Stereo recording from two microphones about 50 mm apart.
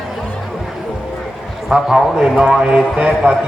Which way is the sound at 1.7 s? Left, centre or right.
Centre.